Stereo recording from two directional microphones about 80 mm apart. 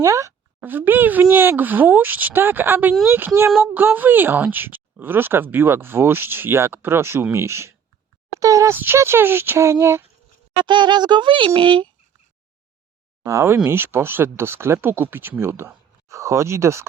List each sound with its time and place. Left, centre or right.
0.0 s speech: right
0.6 s speech: right
8.4 s a sound: right
8.7 s speech: right
10.6 s speech: right
13.2 s speech: right